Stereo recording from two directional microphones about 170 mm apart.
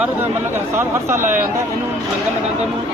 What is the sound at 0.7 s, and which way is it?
Speech, 15° right (ahead or behind).